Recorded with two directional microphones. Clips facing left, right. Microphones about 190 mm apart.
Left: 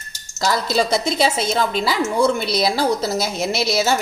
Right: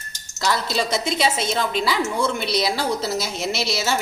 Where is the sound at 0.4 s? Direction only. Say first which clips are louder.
Left 4 dB; 40° left (ahead or behind).